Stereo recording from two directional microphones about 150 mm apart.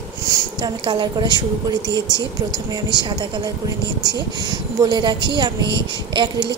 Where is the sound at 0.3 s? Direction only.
25° right (ahead or behind).